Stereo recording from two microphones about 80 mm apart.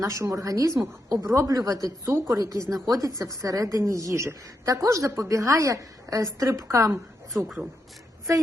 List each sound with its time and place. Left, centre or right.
0.0 s a woman's voice: right
2.1 s speech: right
2.4 s a woman's voice: right
7.4 s speech: centre